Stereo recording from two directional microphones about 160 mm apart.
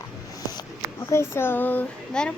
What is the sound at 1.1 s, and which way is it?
Speech, 15° left (ahead or behind).